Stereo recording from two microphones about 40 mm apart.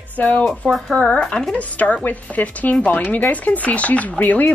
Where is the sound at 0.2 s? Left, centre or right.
Left.